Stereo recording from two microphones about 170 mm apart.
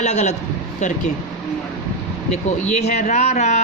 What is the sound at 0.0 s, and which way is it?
Speech, 40° left (ahead or behind).